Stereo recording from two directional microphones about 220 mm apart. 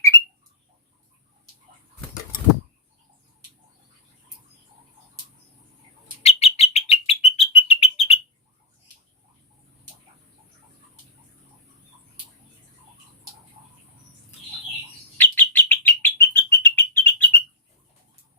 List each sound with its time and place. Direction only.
6.2 s bird: 30° left (ahead or behind)
15.2 s bird: 10° left (ahead or behind)